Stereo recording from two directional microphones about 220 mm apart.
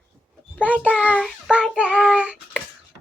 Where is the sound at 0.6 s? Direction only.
5° left (ahead or behind).